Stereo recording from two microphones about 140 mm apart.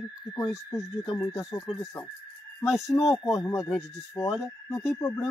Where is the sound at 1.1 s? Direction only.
15° left (ahead or behind).